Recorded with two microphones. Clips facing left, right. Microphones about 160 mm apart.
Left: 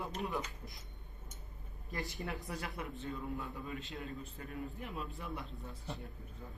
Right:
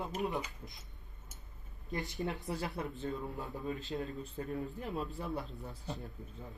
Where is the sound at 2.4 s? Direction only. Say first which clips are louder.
Right 4 dB; 30° right (ahead or behind).